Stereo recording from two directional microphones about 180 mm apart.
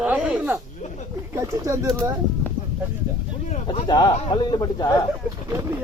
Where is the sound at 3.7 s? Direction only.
25° left (ahead or behind).